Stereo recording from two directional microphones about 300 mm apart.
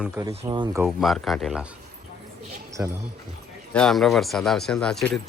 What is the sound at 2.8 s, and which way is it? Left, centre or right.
Speech, centre.